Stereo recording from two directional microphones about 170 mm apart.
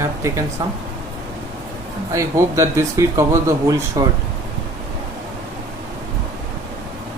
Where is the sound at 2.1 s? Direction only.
20° right (ahead or behind).